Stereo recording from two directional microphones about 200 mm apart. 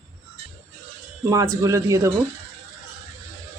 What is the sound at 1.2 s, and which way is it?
Speech, 15° right (ahead or behind).